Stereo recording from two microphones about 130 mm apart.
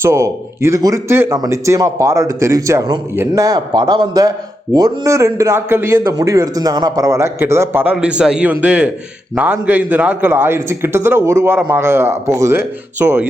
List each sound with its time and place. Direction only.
0.0 s a man's voice: 20° right (ahead or behind)